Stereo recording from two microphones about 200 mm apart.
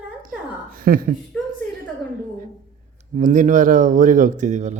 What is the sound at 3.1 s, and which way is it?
Speech, 40° right (ahead or behind).